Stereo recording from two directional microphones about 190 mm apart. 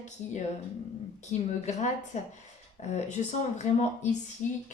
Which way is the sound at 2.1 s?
40° left (ahead or behind).